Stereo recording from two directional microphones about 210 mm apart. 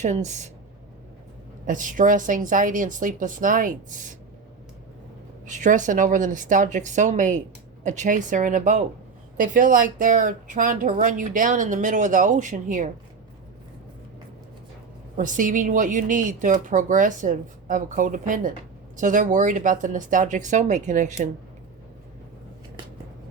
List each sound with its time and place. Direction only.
0.0 s speech: 35° right (ahead or behind)
1.6 s speech: 40° right (ahead or behind)
5.5 s speech: 35° right (ahead or behind)
15.1 s speech: 40° right (ahead or behind)